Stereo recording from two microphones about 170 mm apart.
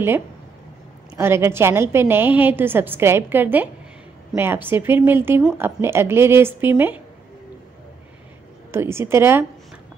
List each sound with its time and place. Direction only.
1.1 s a woman's voice: 15° right (ahead or behind)
8.7 s a woman's voice: 15° right (ahead or behind)